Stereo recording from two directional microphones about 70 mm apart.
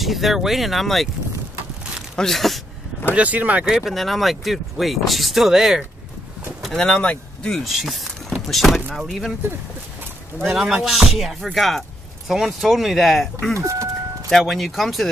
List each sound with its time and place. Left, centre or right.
0.0 s speech: centre
2.1 s speech: centre
3.2 s speech: right
3.6 s speech: centre
6.8 s speech: centre
7.5 s speech: centre
10.4 s speech: centre
13.6 s speech: right
14.3 s speech: centre